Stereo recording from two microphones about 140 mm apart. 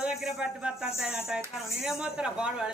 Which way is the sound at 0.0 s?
5° right (ahead or behind).